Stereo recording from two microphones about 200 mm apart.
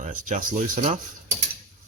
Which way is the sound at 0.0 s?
40° right (ahead or behind).